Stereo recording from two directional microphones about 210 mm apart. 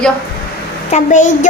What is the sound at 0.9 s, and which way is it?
Speech, 35° left (ahead or behind).